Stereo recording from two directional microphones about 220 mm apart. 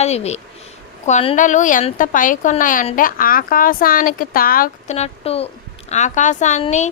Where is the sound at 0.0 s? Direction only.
30° left (ahead or behind).